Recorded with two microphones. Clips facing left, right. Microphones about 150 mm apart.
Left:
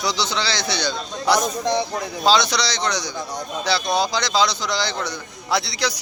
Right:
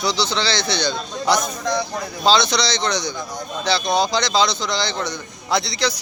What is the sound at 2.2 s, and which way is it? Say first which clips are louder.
A man's voice: right 1 dB; 10° left (ahead or behind).